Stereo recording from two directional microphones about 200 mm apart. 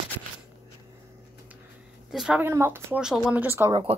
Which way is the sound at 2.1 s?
5° right (ahead or behind).